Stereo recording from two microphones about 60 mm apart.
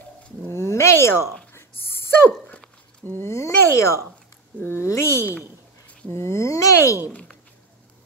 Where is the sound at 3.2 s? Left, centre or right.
Left.